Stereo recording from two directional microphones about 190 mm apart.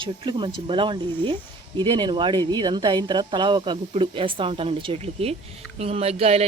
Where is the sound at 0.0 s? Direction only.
25° right (ahead or behind).